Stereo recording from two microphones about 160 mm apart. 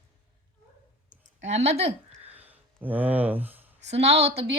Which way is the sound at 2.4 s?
10° right (ahead or behind).